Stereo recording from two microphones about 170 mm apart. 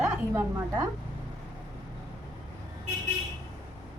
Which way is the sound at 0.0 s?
15° right (ahead or behind).